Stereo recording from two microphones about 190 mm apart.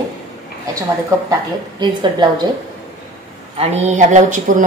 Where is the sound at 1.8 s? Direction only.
25° right (ahead or behind).